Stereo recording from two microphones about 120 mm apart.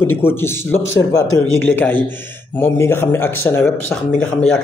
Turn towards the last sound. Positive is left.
turn(degrees=5)  # may be behind; listen again after turning